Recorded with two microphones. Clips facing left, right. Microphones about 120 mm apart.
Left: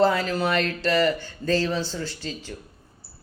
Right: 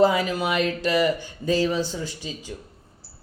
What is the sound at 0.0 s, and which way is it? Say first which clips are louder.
Speech: right 1 dB; 10° right (ahead or behind).